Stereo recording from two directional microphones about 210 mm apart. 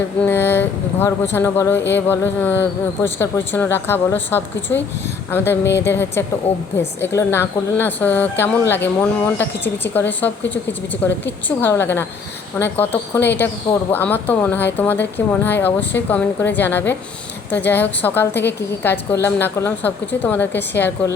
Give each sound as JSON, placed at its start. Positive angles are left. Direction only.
{"t": 0.2, "sound": "speech", "side_deg": 10}
{"t": 6.5, "sound": "a woman's voice", "side_deg": 30}
{"t": 7.0, "sound": "speech", "side_deg": 10}